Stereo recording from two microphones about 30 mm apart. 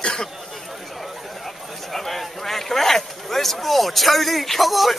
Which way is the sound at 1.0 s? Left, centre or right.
Centre.